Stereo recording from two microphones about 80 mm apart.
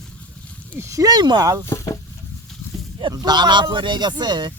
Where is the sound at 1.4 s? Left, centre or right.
Right.